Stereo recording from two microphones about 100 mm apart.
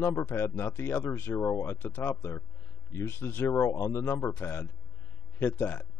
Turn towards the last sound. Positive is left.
turn(degrees=20)  # may be behind; listen again after turning